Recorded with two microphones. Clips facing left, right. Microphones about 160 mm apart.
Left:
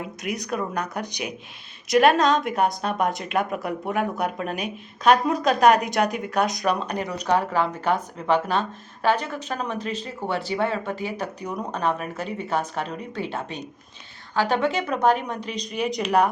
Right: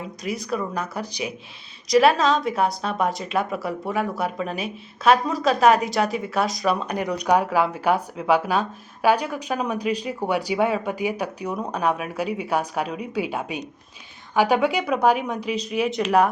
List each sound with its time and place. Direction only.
0.2 s a woman's voice: centre (ahead or behind)